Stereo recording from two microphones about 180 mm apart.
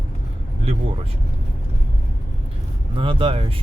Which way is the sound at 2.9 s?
30° right (ahead or behind).